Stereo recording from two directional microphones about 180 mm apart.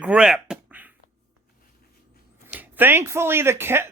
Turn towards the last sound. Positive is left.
turn(degrees=-10)  # may be behind; listen again after turning